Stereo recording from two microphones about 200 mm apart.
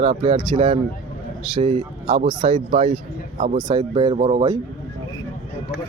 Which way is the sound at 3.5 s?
20° right (ahead or behind).